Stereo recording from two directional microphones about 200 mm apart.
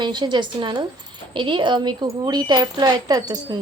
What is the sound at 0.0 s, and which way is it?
Speech, 20° right (ahead or behind).